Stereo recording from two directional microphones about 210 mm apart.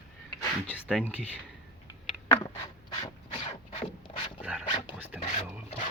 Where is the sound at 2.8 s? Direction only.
20° left (ahead or behind).